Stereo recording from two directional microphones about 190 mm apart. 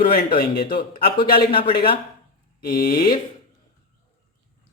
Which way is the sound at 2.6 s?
50° left (ahead or behind).